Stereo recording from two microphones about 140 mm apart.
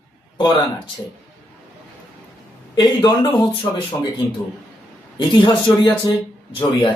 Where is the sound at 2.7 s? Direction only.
30° left (ahead or behind).